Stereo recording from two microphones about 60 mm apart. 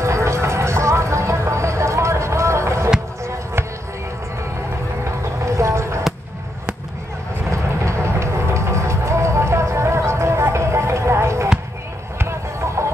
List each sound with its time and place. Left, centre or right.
0.0 s a sound: right
5.4 s vehicle: right
7.5 s vehicle: right
12.2 s basketball bounce: right